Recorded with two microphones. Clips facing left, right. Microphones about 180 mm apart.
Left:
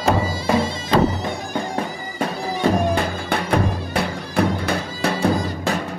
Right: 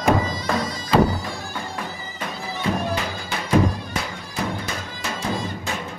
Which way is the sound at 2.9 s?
60° left (ahead or behind).